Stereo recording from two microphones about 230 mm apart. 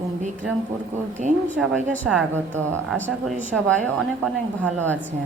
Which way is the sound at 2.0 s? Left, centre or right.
Centre.